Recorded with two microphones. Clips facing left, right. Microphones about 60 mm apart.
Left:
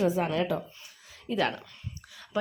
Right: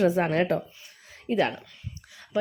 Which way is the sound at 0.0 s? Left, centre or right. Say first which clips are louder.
Right 4 dB; right.